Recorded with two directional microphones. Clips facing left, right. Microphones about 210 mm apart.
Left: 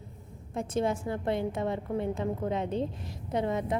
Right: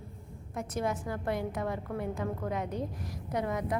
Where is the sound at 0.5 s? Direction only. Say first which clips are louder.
Left 4 dB; 25° left (ahead or behind).